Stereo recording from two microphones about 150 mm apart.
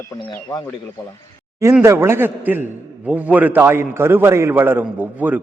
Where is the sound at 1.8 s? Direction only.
15° right (ahead or behind).